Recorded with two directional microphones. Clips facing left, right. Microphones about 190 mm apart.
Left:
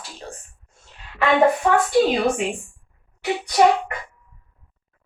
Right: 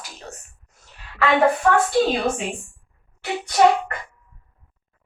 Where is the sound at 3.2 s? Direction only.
15° left (ahead or behind).